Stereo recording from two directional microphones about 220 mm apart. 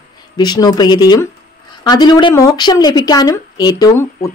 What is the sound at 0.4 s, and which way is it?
Speech, 20° left (ahead or behind).